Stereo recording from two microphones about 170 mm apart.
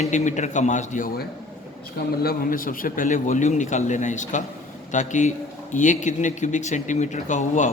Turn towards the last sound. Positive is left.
turn(degrees=45)  # may be behind; listen again after turning